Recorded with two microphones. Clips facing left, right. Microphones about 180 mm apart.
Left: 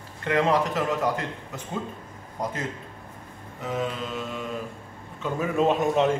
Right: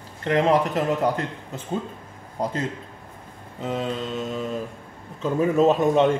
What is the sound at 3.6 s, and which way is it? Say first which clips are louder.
Mantra: right 2 dB; 30° right (ahead or behind).